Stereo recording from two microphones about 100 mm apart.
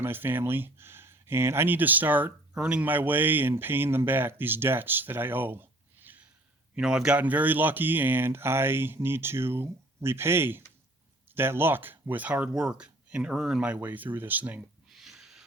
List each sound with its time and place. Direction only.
0.0 s speech: 20° right (ahead or behind)
6.7 s speech: 10° right (ahead or behind)
14.8 s a sound: 5° right (ahead or behind)